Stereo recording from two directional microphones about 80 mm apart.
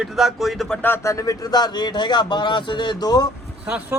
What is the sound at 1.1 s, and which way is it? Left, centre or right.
Speech, left.